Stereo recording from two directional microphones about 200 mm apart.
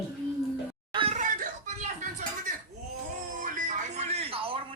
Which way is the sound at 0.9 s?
30° right (ahead or behind).